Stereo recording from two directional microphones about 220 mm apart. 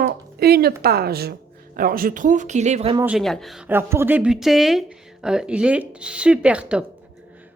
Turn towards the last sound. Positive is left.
turn(degrees=-5)  # may be behind; listen again after turning